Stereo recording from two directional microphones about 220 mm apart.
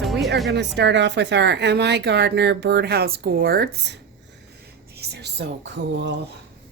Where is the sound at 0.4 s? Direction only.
50° right (ahead or behind).